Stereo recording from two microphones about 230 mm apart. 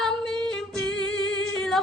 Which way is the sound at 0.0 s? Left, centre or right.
Centre.